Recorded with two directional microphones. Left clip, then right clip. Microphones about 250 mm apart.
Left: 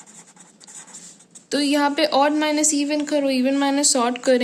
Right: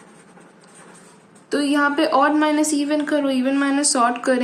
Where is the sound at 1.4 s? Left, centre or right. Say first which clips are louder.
Right 1 dB; left.